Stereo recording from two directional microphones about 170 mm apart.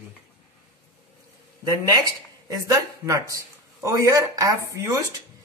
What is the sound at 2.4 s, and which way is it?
Speech, 20° right (ahead or behind).